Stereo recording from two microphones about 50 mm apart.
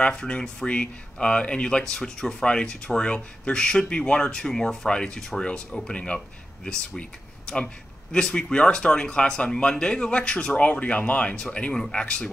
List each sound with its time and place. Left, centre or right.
0.0 s speech: left